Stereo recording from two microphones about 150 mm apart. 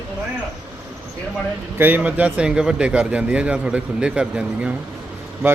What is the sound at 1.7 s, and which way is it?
A man's voice, 15° right (ahead or behind).